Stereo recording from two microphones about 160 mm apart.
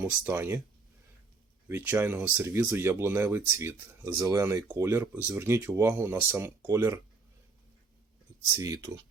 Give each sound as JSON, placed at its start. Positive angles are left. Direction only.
{"t": 0.3, "sound": "speech", "side_deg": -15}
{"t": 1.6, "sound": "speech", "side_deg": -10}
{"t": 8.5, "sound": "speech", "side_deg": -20}